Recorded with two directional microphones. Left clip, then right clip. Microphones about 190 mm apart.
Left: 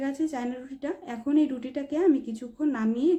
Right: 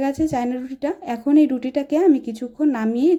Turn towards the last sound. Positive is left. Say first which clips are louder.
# right 7 dB
turn(degrees=-35)  # may be behind; listen again after turning